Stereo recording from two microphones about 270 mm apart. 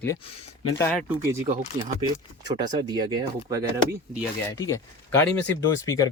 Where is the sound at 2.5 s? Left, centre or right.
Centre.